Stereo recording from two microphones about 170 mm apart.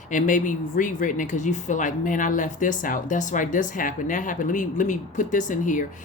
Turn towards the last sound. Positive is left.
turn(degrees=50)  # may be behind; listen again after turning